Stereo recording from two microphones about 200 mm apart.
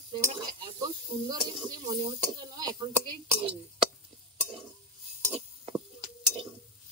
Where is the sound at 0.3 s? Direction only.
25° right (ahead or behind).